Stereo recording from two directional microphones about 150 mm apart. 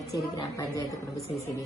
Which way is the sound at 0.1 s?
20° left (ahead or behind).